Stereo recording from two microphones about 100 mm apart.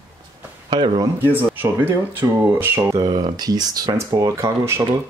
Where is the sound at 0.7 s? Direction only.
45° right (ahead or behind).